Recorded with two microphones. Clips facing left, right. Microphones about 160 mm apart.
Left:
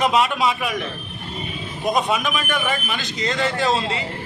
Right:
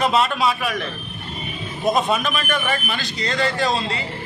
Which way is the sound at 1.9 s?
15° left (ahead or behind).